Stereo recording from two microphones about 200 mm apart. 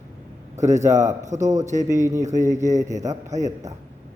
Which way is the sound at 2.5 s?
35° right (ahead or behind).